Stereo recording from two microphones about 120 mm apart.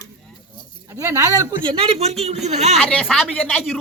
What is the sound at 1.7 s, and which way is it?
Speech, 55° right (ahead or behind).